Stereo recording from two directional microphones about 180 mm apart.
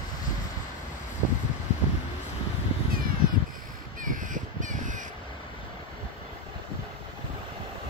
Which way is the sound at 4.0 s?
45° right (ahead or behind).